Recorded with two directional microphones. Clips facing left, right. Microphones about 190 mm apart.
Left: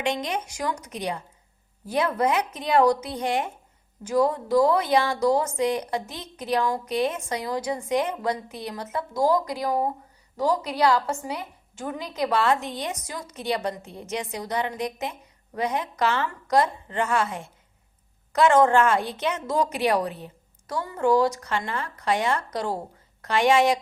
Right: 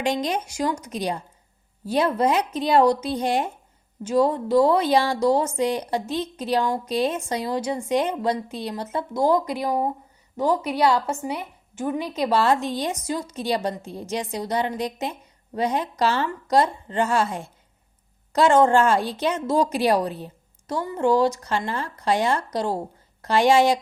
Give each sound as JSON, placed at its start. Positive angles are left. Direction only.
{"t": 0.0, "sound": "a woman's voice", "side_deg": -35}